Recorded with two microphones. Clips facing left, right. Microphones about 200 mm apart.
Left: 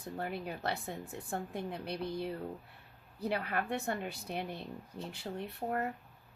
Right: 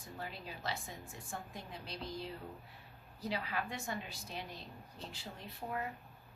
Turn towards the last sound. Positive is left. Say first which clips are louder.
# left 6 dB
turn(degrees=50)  # may be behind; listen again after turning